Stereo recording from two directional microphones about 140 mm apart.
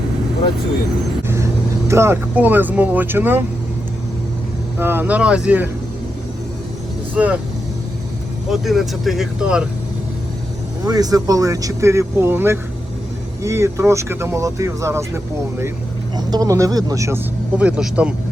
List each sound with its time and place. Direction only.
1.9 s speech: 20° right (ahead or behind)
4.8 s speech: 15° right (ahead or behind)
7.1 s speech: 10° right (ahead or behind)
8.4 s speech: centre (ahead or behind)
10.8 s speech: 25° right (ahead or behind)
17.6 s speech: 10° right (ahead or behind)